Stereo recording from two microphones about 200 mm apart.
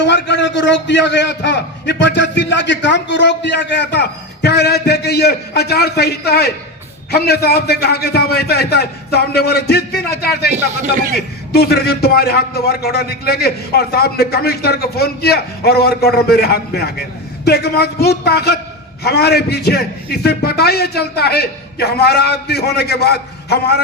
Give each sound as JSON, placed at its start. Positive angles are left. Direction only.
{"t": 0.0, "sound": "a man's voice", "side_deg": 60}
{"t": 10.5, "sound": "a man's voice", "side_deg": -40}
{"t": 11.5, "sound": "a man's voice", "side_deg": 55}